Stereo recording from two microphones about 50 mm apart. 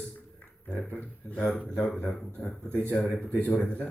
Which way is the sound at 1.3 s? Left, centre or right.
Left.